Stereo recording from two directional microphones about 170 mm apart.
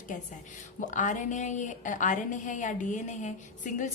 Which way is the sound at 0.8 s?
50° left (ahead or behind).